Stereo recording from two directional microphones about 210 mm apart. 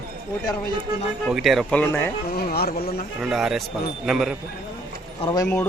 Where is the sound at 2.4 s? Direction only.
50° left (ahead or behind).